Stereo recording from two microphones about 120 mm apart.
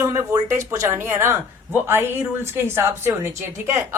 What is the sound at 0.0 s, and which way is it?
Speech, 20° right (ahead or behind).